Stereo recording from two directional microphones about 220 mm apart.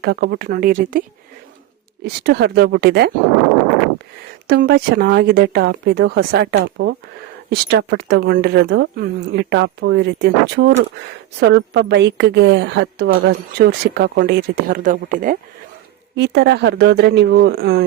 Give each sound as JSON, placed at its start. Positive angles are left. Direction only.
{"t": 0.0, "sound": "a woman's voice", "side_deg": -50}
{"t": 2.0, "sound": "a woman's voice", "side_deg": -45}
{"t": 4.4, "sound": "a woman's voice", "side_deg": -45}
{"t": 16.1, "sound": "a woman's voice", "side_deg": -50}